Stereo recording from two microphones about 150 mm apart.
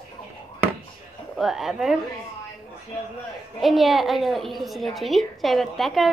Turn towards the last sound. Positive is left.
turn(degrees=0)  # may be behind; listen again after turning